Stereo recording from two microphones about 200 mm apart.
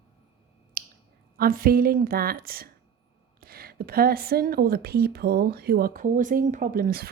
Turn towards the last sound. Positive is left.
turn(degrees=-45)  # may be behind; listen again after turning